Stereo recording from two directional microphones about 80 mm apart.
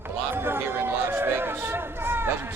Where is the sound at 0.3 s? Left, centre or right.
Right.